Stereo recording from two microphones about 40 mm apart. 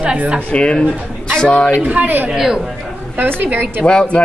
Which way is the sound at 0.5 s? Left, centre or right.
Left.